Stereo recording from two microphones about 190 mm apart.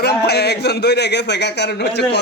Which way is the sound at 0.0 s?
60° left (ahead or behind).